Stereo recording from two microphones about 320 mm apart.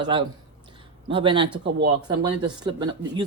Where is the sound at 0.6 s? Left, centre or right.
Centre.